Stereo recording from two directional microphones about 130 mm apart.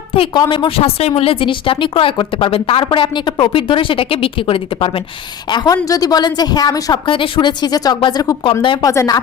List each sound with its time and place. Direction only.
0.1 s a woman's voice: 40° left (ahead or behind)
7.0 s speech: 40° left (ahead or behind)
8.6 s speech: 40° left (ahead or behind)
8.9 s speech: 20° left (ahead or behind)